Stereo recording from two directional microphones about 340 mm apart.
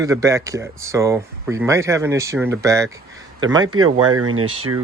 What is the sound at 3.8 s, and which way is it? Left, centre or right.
Speech, right.